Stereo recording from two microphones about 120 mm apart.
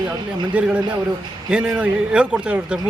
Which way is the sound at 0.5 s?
10° right (ahead or behind).